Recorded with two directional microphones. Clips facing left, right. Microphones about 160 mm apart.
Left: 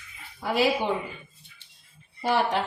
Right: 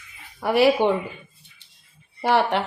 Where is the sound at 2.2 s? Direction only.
70° right (ahead or behind).